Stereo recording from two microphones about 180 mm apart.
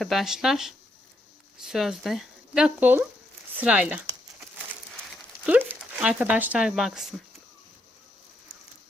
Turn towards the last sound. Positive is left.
turn(degrees=0)  # may be behind; listen again after turning